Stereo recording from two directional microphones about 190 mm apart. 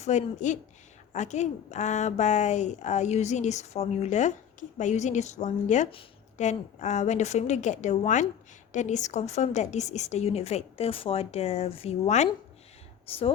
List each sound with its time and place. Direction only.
0.0 s speech: 40° left (ahead or behind)